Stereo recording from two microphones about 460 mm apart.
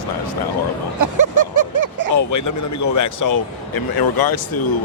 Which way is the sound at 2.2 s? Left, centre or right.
Left.